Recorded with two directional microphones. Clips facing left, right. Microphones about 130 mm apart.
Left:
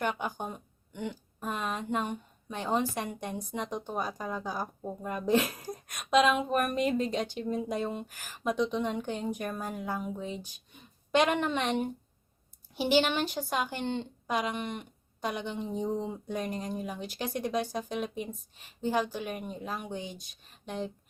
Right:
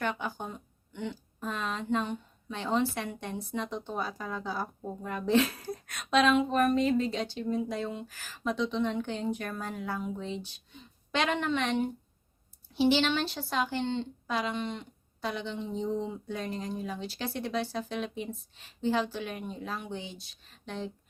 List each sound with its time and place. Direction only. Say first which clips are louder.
0.0 s a woman's voice: left 1 dB; 15° left (ahead or behind)
20.0 s speech: left 2 dB; 45° left (ahead or behind)
20.7 s a woman's voice: left 2 dB; 15° left (ahead or behind)